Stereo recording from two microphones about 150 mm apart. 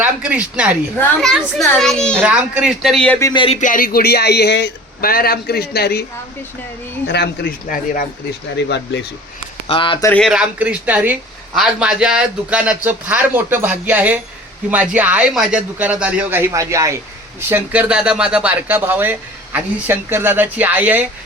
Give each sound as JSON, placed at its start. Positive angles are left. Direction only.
{"t": 0.0, "sound": "speech", "side_deg": -10}
{"t": 1.2, "sound": "a child's voice", "side_deg": 5}
{"t": 2.2, "sound": "a child's voice", "side_deg": -5}
{"t": 3.3, "sound": "speech", "side_deg": 35}
{"t": 3.6, "sound": "speech", "side_deg": 65}
{"t": 7.1, "sound": "speech", "side_deg": 85}
{"t": 9.6, "sound": "speech", "side_deg": 35}
{"t": 10.2, "sound": "a man's voice", "side_deg": -5}
{"t": 17.5, "sound": "a man's voice", "side_deg": -10}